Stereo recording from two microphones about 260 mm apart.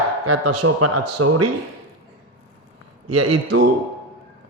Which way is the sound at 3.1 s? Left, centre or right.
Right.